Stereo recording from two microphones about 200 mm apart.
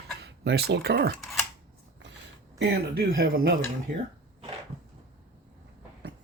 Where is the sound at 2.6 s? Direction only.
55° right (ahead or behind).